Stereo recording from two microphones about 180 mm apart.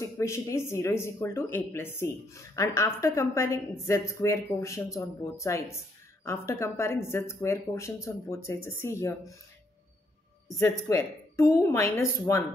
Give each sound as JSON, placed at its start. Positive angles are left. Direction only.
{"t": 0.0, "sound": "speech", "side_deg": 15}
{"t": 10.6, "sound": "speech", "side_deg": 15}